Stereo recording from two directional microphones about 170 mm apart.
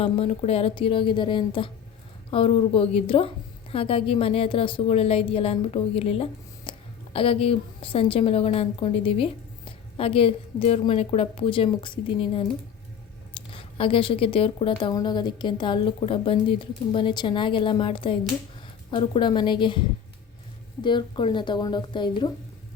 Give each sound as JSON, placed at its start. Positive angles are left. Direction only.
{"t": 0.0, "sound": "a woman's voice", "side_deg": 35}
{"t": 20.8, "sound": "speech", "side_deg": 30}